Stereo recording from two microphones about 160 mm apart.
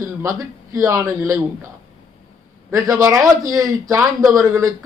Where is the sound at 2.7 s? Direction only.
20° right (ahead or behind).